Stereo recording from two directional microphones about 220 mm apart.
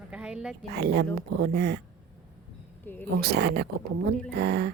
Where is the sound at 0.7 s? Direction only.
45° right (ahead or behind).